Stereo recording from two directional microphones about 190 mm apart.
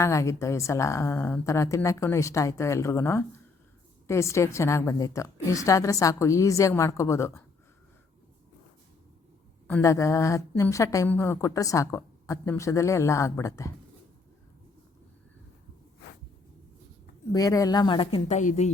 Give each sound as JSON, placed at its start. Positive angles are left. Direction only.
{"t": 0.0, "sound": "a woman's voice", "side_deg": 15}
{"t": 9.6, "sound": "a woman's voice", "side_deg": 15}
{"t": 17.3, "sound": "speech", "side_deg": 20}